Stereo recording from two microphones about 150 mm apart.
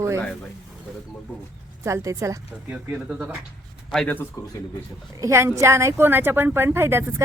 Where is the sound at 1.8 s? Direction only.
20° right (ahead or behind).